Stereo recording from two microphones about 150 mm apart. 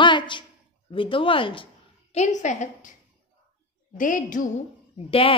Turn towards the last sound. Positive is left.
turn(degrees=40)  # may be behind; listen again after turning